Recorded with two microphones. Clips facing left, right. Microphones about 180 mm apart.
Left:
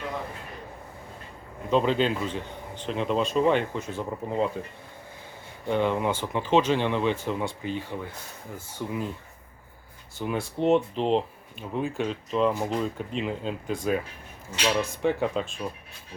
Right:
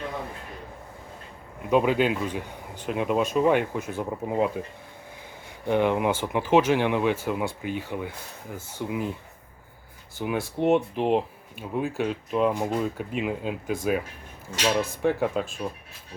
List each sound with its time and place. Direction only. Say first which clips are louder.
1.7 s speech: right 2 dB; 10° right (ahead or behind)
5.6 s speech: right 2 dB; 15° right (ahead or behind)
10.2 s speech: right 1 dB; 5° right (ahead or behind)